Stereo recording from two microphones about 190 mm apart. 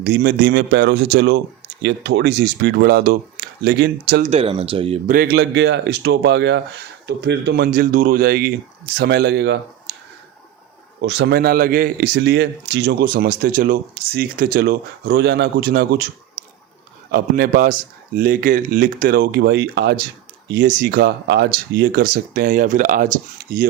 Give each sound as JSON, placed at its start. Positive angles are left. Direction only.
{"t": 0.0, "sound": "speech", "side_deg": -60}
{"t": 4.3, "sound": "speech", "side_deg": -30}
{"t": 5.0, "sound": "speech", "side_deg": -50}
{"t": 9.9, "sound": "a sound", "side_deg": -60}
{"t": 11.0, "sound": "speech", "side_deg": -60}
{"t": 17.1, "sound": "speech", "side_deg": -50}
{"t": 20.5, "sound": "speech", "side_deg": -45}